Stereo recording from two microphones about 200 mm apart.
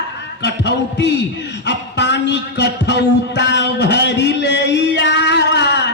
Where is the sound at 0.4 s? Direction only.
60° left (ahead or behind).